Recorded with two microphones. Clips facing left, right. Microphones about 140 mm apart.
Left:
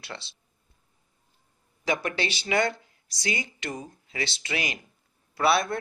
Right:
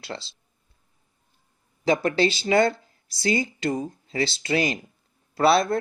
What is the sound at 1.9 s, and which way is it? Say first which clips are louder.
Speech: right 7 dB; 30° right (ahead or behind).